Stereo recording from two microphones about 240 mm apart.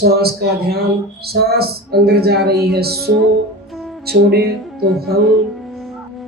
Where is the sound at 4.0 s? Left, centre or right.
Right.